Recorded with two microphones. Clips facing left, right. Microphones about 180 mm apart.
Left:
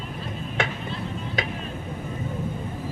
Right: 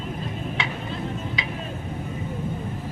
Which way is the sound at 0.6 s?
50° left (ahead or behind).